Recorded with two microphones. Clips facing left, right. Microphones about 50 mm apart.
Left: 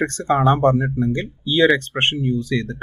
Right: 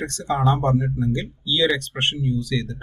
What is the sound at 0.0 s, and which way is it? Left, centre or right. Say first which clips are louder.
Speech: left 5 dB; left.